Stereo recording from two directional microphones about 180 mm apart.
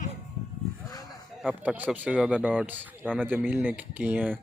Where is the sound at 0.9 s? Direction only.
20° left (ahead or behind).